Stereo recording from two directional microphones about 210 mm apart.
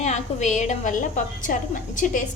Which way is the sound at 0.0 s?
35° left (ahead or behind).